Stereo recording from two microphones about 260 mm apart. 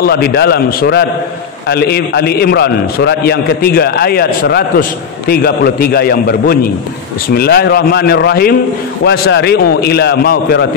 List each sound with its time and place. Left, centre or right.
0.0 s a man's voice: left